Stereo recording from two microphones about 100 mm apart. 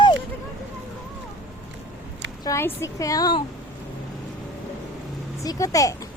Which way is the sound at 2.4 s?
35° left (ahead or behind).